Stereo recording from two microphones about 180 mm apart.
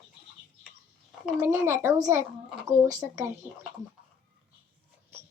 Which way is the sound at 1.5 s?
15° right (ahead or behind).